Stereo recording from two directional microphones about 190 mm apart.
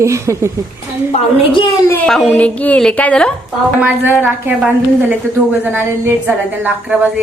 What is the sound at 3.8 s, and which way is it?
A woman's voice, 10° right (ahead or behind).